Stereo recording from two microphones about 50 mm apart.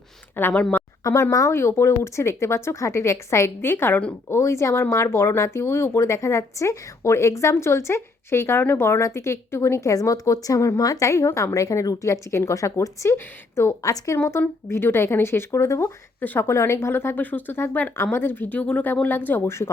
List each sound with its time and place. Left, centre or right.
0.4 s a woman's voice: left
1.0 s speech: left
3.6 s a woman's voice: left
4.3 s a woman's voice: left
17.2 s speech: left
19.5 s speech: left